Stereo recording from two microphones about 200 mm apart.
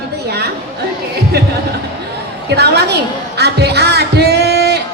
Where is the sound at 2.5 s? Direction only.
55° right (ahead or behind).